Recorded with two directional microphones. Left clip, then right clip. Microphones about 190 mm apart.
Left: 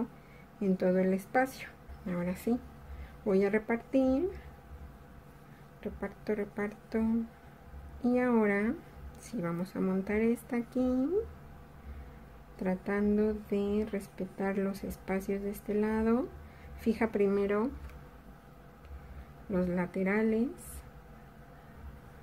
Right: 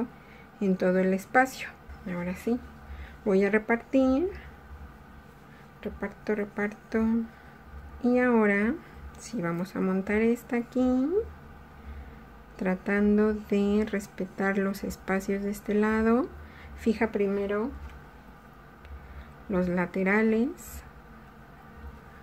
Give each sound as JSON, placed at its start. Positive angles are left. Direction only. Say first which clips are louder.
{"t": 0.6, "sound": "speech", "louder": "right 4 dB", "side_deg": -10}
{"t": 2.0, "sound": "speech", "louder": "right 3 dB", "side_deg": 10}
{"t": 3.3, "sound": "speech", "louder": "right 5 dB", "side_deg": -10}
{"t": 5.8, "sound": "speech", "louder": "right 4 dB", "side_deg": -10}
{"t": 12.5, "sound": "a woman's voice", "louder": "right 5 dB", "side_deg": -15}
{"t": 17.1, "sound": "speech", "louder": "right 1 dB", "side_deg": 10}
{"t": 19.5, "sound": "speech", "louder": "right 5 dB", "side_deg": -15}